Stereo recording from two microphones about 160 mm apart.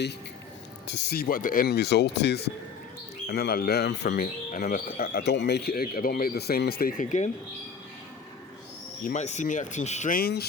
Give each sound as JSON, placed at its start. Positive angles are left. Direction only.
{"t": 0.9, "sound": "speech", "side_deg": 90}
{"t": 3.2, "sound": "speech", "side_deg": 75}
{"t": 4.5, "sound": "speech", "side_deg": 65}
{"t": 9.0, "sound": "speech", "side_deg": 45}
{"t": 10.2, "sound": "speech", "side_deg": 75}